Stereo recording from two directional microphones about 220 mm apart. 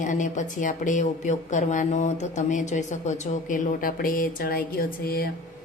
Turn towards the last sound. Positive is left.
turn(degrees=45)  # may be behind; listen again after turning